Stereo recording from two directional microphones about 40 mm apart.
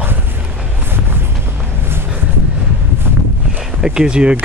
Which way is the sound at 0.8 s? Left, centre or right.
Right.